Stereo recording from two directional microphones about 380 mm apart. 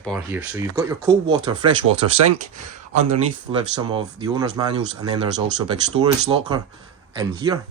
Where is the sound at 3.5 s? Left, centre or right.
Centre.